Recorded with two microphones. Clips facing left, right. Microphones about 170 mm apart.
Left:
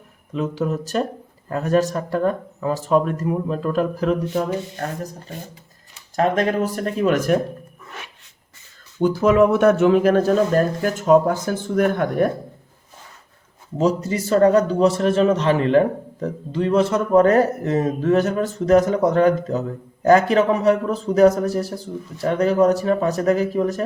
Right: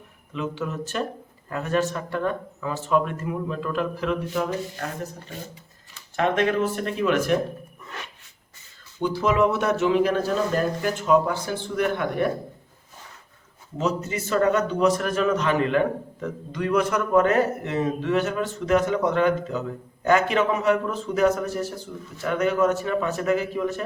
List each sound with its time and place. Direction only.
0.3 s a man's voice: 40° left (ahead or behind)
6.1 s a man's voice: 40° left (ahead or behind)
9.0 s a man's voice: 45° left (ahead or behind)
13.7 s a man's voice: 35° left (ahead or behind)